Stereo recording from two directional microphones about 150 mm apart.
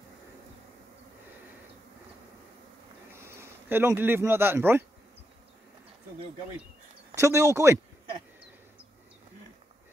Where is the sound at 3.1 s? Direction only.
15° right (ahead or behind).